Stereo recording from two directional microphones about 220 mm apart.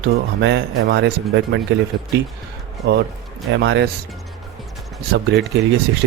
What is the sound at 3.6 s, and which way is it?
Speech, 55° right (ahead or behind).